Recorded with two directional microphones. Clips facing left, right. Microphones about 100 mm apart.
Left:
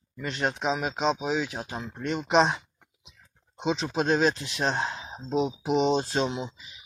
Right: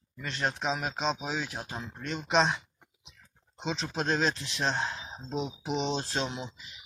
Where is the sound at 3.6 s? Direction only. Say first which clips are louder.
Left 6 dB; 10° left (ahead or behind).